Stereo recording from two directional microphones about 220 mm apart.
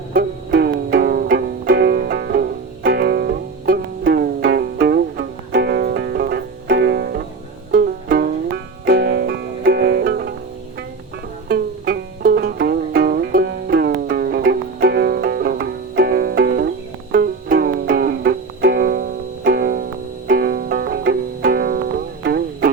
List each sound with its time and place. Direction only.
0.1 s music: 45° right (ahead or behind)
11.4 s music: 45° right (ahead or behind)